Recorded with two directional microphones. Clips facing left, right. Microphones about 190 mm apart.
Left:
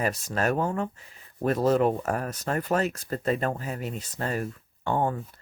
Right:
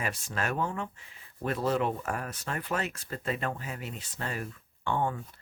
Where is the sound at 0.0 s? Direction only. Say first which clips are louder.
Left 7 dB; 40° left (ahead or behind).